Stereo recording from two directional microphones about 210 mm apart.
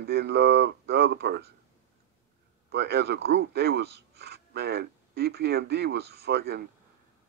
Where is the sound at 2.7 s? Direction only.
50° right (ahead or behind).